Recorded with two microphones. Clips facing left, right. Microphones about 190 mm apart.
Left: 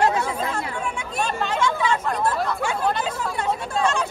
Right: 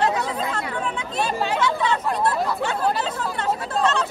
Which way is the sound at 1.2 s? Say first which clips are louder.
Right 1 dB; 5° right (ahead or behind).